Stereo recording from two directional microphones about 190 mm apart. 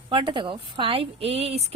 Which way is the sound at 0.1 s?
25° right (ahead or behind).